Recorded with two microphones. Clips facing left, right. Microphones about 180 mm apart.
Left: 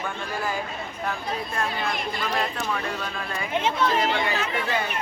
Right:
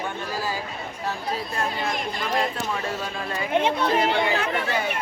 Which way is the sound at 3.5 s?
55° right (ahead or behind).